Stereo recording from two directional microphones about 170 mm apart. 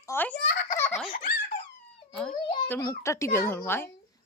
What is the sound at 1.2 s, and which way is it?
Baby laughter, 60° left (ahead or behind).